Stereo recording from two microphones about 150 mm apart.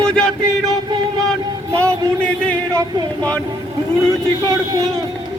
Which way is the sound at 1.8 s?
20° right (ahead or behind).